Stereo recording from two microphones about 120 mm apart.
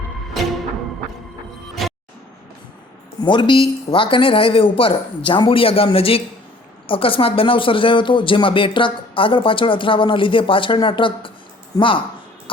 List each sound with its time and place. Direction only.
0.4 s music: centre (ahead or behind)
1.8 s music: centre (ahead or behind)
3.2 s speech: 40° left (ahead or behind)
11.7 s a woman's voice: 30° left (ahead or behind)